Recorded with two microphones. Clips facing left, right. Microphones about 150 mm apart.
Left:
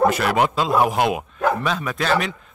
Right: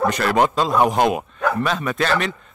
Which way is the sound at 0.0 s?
5° left (ahead or behind).